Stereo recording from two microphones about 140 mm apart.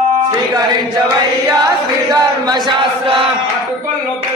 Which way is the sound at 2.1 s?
30° right (ahead or behind).